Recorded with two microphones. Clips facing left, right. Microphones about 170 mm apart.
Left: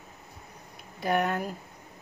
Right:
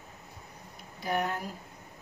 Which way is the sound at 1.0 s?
60° left (ahead or behind).